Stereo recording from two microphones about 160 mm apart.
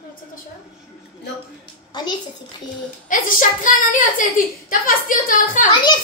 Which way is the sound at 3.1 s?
55° left (ahead or behind).